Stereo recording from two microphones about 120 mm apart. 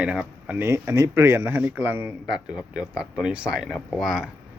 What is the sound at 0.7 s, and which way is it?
A man's voice, 25° right (ahead or behind).